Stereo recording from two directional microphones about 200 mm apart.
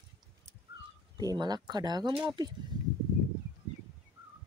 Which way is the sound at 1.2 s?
20° right (ahead or behind).